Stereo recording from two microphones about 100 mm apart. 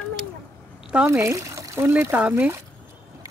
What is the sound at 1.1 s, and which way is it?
Speech, 30° right (ahead or behind).